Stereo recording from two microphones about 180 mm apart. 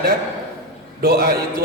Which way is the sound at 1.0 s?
60° right (ahead or behind).